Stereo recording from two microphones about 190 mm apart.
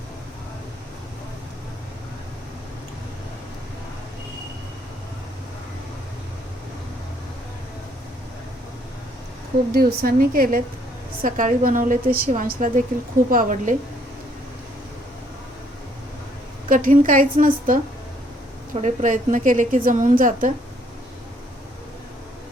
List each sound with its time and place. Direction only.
9.7 s a woman's voice: 50° right (ahead or behind)
16.6 s a woman's voice: 45° right (ahead or behind)